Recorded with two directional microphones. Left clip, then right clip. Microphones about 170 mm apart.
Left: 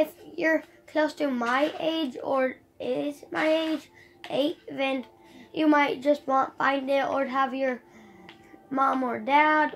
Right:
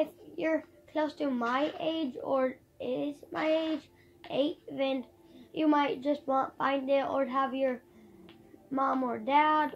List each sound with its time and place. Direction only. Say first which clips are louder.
0.0 s a child's voice: left 6 dB; 35° left (ahead or behind)